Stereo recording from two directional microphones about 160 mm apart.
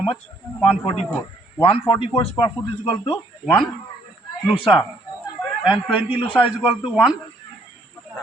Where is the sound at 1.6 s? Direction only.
35° left (ahead or behind).